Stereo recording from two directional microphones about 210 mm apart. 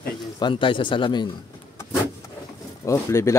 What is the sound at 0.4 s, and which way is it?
Speech, 25° left (ahead or behind).